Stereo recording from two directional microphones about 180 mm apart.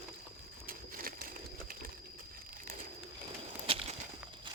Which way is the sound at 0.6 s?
55° right (ahead or behind).